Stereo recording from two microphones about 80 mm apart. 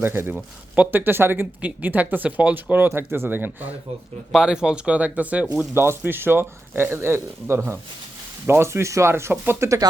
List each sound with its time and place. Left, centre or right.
0.0 s speech: right
4.3 s speech: centre
5.7 s speech: right
9.6 s speech: right